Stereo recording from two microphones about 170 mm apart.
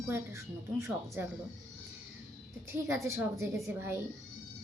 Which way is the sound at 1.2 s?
10° right (ahead or behind).